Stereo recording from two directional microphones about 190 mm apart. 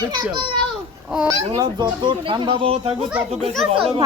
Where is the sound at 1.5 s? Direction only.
25° right (ahead or behind).